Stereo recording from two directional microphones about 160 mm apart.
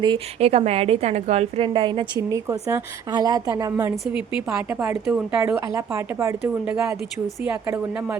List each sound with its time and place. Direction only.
0.0 s a woman's voice: 35° right (ahead or behind)
3.9 s speech: 5° right (ahead or behind)